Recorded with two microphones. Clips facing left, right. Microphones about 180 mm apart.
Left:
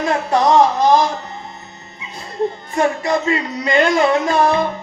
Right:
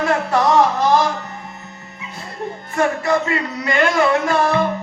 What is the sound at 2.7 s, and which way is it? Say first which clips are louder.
Speech: right 1 dB; 20° left (ahead or behind).